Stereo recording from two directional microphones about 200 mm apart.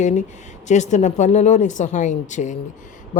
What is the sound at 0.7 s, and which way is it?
Speech, 35° left (ahead or behind).